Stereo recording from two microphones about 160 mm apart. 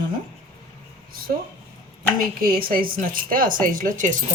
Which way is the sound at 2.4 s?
65° right (ahead or behind).